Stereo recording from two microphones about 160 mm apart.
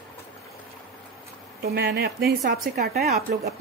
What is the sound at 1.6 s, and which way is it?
Speech, 90° right.